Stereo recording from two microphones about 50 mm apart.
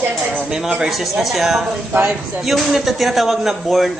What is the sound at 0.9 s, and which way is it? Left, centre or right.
Speech, centre.